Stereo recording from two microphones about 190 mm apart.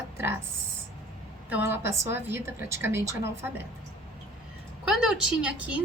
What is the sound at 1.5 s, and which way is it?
A woman's voice, 10° right (ahead or behind).